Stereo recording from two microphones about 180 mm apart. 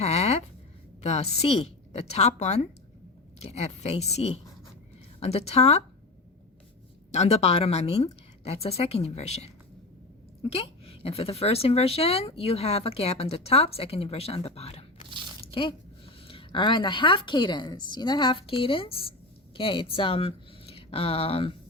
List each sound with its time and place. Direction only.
0.0 s a sound: 35° left (ahead or behind)
1.0 s a woman's voice: 35° left (ahead or behind)
7.1 s a woman's voice: 35° left (ahead or behind)
10.5 s a woman's voice: 35° left (ahead or behind)
16.2 s a woman's voice: 30° left (ahead or behind)